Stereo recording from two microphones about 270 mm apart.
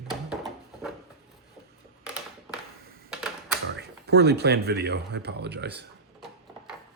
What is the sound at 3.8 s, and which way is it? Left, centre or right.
Speech, right.